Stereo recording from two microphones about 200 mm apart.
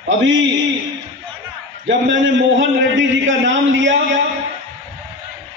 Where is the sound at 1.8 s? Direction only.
65° right (ahead or behind).